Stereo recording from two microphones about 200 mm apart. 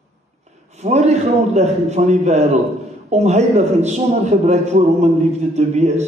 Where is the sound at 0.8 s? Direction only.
35° right (ahead or behind).